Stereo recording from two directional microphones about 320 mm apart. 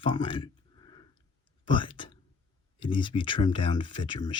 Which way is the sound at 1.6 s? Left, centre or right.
Centre.